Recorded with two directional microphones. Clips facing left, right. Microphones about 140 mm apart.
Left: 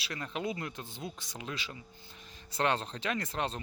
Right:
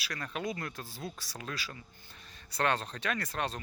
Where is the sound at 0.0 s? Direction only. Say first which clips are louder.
Left 1 dB; 25° left (ahead or behind).